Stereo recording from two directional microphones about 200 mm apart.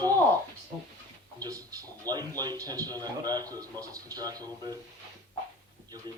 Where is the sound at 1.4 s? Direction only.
15° right (ahead or behind).